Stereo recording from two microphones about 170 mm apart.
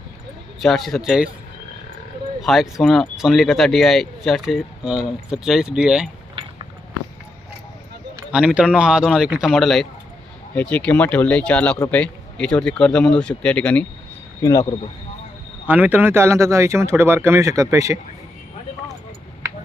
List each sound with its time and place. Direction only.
0.6 s speech: centre (ahead or behind)
2.4 s speech: centre (ahead or behind)
8.3 s speech: 5° right (ahead or behind)
14.4 s speech: 15° left (ahead or behind)
15.6 s speech: 10° right (ahead or behind)